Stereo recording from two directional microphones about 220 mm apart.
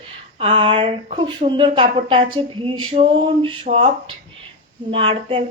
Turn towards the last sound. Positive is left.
turn(degrees=-25)  # may be behind; listen again after turning